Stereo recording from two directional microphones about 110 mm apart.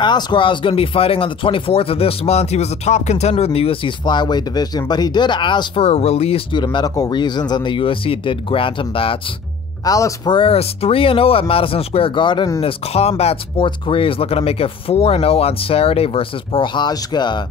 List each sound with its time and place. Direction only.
0.0 s speech: 45° left (ahead or behind); by 3.9 s 60° left (ahead or behind)
4.0 s speech: 40° left (ahead or behind)
5.8 s speech: 70° left (ahead or behind)
6.5 s speech: 45° left (ahead or behind)
9.8 s speech: 35° left (ahead or behind)
10.3 s speech: 60° left (ahead or behind)
12.6 s speech: 70° left (ahead or behind)
13.7 s speech: 55° left (ahead or behind)